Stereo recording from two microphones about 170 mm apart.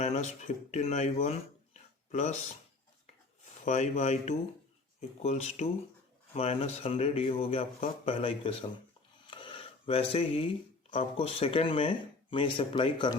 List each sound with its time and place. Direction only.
0.0 s speech: 40° left (ahead or behind)
3.6 s speech: 45° left (ahead or behind)
9.2 s a sound: 30° left (ahead or behind)
10.9 s speech: 35° left (ahead or behind)